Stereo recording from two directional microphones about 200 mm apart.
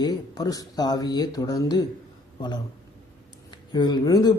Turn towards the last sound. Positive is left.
turn(degrees=20)  # may be behind; listen again after turning